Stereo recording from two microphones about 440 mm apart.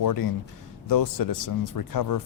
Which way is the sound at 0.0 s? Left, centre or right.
Left.